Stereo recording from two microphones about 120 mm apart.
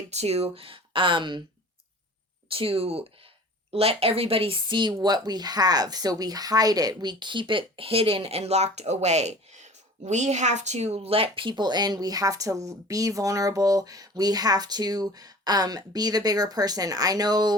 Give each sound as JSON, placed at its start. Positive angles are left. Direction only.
{"t": 0.1, "sound": "speech", "side_deg": -65}
{"t": 2.5, "sound": "speech", "side_deg": -50}